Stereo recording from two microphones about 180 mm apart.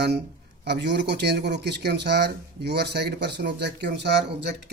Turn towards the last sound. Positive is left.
turn(degrees=-70)  # may be behind; listen again after turning